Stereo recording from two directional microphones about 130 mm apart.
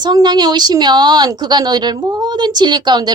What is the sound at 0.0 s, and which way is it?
A woman's voice, 30° right (ahead or behind).